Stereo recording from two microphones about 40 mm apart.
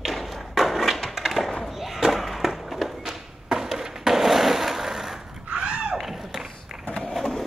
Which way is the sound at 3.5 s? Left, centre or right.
Centre.